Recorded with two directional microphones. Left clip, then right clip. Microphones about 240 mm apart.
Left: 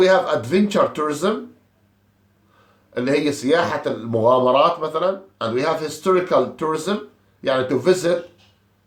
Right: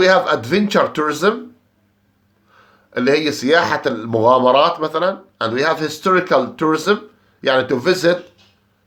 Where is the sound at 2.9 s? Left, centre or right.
Right.